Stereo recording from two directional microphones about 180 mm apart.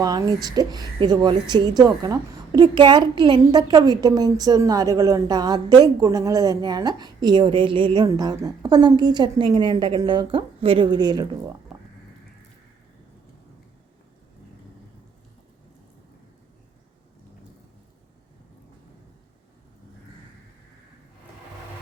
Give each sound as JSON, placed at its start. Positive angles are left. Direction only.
{"t": 0.0, "sound": "a woman's voice", "side_deg": -20}